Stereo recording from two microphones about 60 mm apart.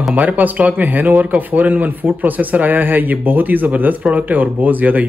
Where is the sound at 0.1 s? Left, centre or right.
Right.